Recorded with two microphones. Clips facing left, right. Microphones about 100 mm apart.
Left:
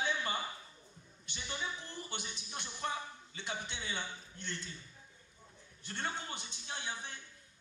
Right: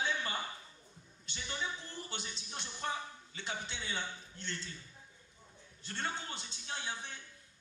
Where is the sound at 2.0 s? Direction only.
15° left (ahead or behind).